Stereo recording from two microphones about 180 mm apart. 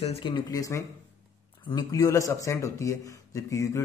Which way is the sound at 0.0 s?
30° left (ahead or behind).